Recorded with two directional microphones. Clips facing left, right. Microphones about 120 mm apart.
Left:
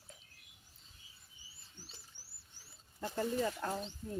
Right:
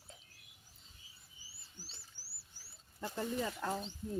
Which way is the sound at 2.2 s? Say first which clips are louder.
Right 1 dB; 20° left (ahead or behind).